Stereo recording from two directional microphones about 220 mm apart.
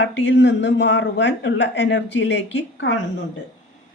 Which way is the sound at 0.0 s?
55° left (ahead or behind).